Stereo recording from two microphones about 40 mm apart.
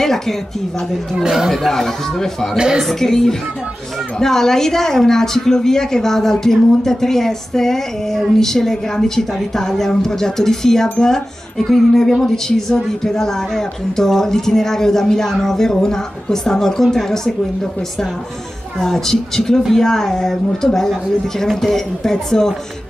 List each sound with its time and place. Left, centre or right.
0.0 s a woman's voice: centre
1.5 s a woman's voice: centre
2.5 s speech: centre
2.8 s a woman's voice: centre
18.8 s a woman's voice: centre